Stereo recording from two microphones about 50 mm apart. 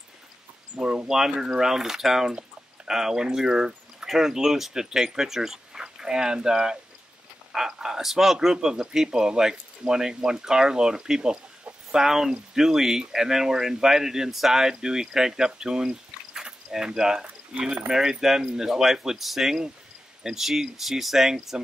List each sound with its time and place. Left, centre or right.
0.7 s speech: centre
17.6 s speech: right
17.8 s speech: centre